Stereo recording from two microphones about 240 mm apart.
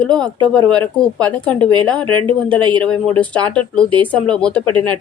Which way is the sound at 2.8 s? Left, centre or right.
Centre.